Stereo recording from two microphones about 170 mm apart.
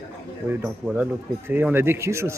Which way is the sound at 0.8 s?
5° right (ahead or behind).